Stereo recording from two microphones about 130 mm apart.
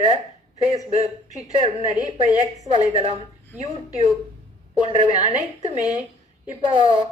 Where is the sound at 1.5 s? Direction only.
40° right (ahead or behind).